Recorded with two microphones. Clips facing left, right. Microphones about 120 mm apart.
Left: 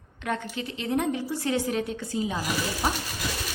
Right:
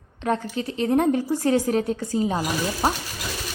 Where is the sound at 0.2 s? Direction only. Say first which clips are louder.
Right 6 dB; 35° right (ahead or behind).